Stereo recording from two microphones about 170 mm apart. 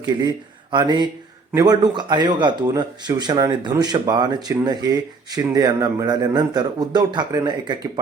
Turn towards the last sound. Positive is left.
turn(degrees=-25)  # may be behind; listen again after turning